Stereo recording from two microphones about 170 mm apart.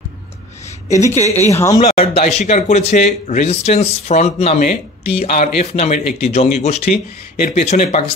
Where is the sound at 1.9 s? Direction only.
35° left (ahead or behind).